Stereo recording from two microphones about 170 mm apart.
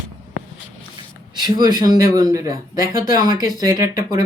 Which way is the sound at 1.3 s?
25° right (ahead or behind).